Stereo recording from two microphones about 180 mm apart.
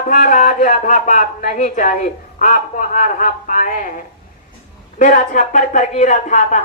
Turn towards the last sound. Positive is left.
turn(degrees=40)  # may be behind; listen again after turning